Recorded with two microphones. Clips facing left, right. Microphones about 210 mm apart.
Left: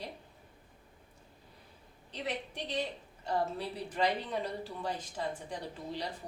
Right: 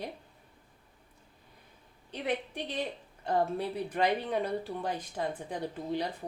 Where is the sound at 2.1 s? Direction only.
55° right (ahead or behind).